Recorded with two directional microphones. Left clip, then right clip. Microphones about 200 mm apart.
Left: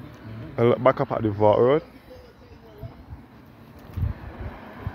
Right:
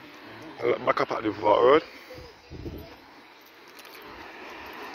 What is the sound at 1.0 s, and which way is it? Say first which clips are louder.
Speech: left 4 dB; 10° left (ahead or behind).